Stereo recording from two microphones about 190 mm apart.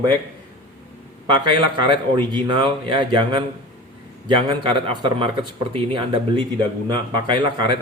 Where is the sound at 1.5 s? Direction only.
25° right (ahead or behind).